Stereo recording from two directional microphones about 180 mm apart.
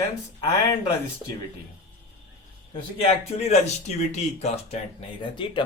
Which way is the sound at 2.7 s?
30° left (ahead or behind).